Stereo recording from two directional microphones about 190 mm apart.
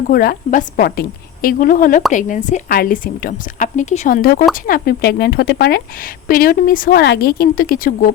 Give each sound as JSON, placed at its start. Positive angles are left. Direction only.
{"t": 0.1, "sound": "a woman's voice", "side_deg": 50}